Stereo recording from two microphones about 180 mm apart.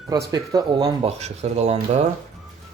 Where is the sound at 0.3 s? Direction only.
20° right (ahead or behind).